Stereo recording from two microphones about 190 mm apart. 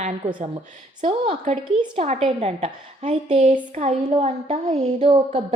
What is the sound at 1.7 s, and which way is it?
A woman's voice, 35° right (ahead or behind).